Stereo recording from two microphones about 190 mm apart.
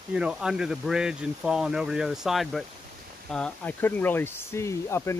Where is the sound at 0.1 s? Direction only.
5° right (ahead or behind).